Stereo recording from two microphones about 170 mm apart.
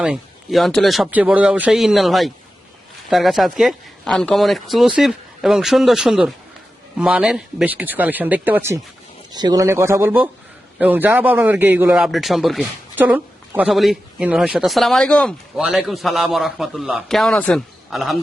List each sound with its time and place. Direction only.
0.0 s a man's voice: centre (ahead or behind)
9.3 s a man's voice: 25° right (ahead or behind); by 18.2 s centre (ahead or behind)